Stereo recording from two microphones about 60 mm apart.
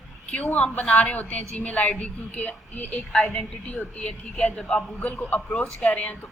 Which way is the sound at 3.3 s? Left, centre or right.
Left.